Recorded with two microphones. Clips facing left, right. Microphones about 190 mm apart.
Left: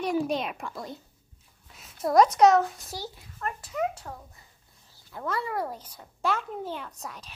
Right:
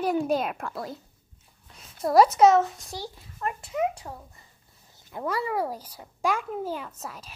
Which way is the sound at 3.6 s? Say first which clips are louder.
Right 2 dB; 25° right (ahead or behind).